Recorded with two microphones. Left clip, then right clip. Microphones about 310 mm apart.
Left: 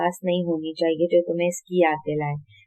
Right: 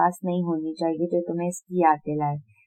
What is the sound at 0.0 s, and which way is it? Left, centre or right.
Speech, centre.